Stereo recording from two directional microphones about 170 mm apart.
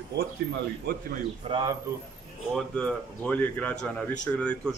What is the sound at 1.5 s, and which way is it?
Speech, 35° right (ahead or behind).